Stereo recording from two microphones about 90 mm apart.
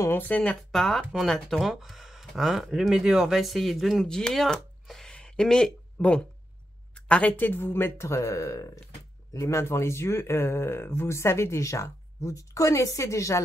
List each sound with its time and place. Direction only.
0.0 s speech: 20° left (ahead or behind)
0.6 s speech: 5° left (ahead or behind); by 13.4 s 35° left (ahead or behind)